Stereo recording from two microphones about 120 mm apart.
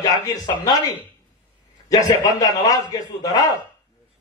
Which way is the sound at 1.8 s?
30° left (ahead or behind).